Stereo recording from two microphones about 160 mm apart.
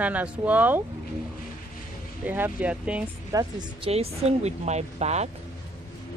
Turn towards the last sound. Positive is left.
turn(degrees=-45)  # may be behind; listen again after turning